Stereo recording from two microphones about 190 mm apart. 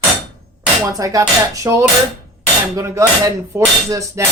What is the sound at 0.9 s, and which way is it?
Speech, 15° right (ahead or behind).